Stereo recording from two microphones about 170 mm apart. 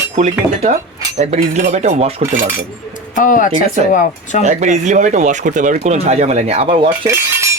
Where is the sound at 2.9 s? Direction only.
50° left (ahead or behind).